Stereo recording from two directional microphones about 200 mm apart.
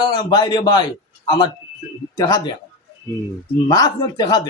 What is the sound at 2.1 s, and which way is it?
Speech, 20° left (ahead or behind).